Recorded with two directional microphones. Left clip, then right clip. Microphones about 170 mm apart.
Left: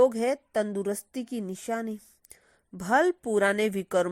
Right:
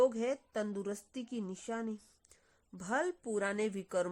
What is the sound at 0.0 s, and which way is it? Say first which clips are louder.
A woman's voice: left 8 dB; 30° left (ahead or behind).